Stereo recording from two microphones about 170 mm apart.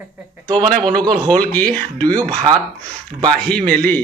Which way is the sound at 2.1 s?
25° right (ahead or behind).